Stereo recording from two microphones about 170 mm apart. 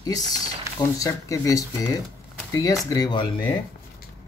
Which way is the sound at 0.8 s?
20° left (ahead or behind).